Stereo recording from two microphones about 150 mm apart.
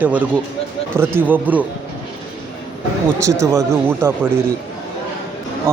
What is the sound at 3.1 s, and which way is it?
Speech, 20° right (ahead or behind).